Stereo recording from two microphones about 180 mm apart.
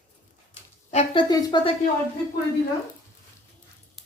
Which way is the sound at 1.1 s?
25° left (ahead or behind).